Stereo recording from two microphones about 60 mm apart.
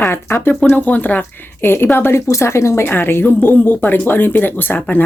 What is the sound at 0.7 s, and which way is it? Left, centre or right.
Speech, left.